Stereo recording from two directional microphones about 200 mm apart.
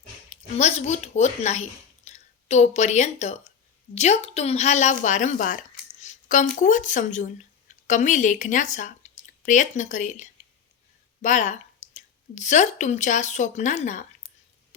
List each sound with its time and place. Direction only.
0.3 s a woman's voice: 35° left (ahead or behind)